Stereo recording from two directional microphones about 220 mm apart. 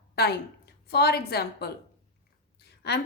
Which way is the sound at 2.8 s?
50° left (ahead or behind).